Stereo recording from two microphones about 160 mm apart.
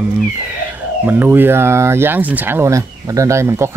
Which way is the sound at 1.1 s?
10° right (ahead or behind).